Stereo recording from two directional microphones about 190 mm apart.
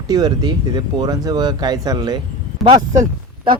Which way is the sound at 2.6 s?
Centre (ahead or behind).